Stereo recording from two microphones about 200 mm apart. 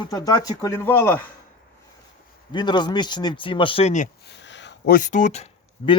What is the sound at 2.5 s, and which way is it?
Speech, 20° left (ahead or behind).